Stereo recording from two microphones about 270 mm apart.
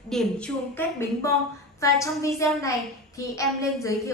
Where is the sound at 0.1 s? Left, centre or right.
Centre.